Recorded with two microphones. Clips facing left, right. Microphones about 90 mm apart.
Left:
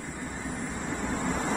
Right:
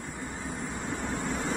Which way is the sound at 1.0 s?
35° left (ahead or behind).